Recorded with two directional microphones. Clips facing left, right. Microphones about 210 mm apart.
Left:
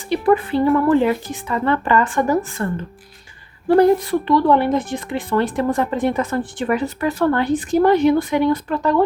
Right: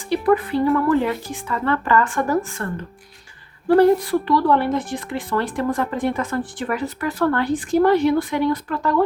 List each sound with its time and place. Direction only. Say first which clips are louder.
0.1 s a woman's voice: left 2 dB; 25° left (ahead or behind)
3.8 s speech: left 1 dB; 20° left (ahead or behind)